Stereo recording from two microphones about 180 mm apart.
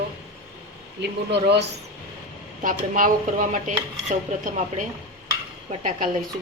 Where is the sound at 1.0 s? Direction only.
70° right (ahead or behind).